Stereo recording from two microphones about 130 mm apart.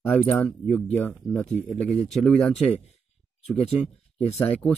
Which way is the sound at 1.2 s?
5° left (ahead or behind).